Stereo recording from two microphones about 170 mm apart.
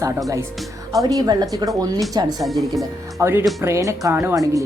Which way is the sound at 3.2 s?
15° right (ahead or behind).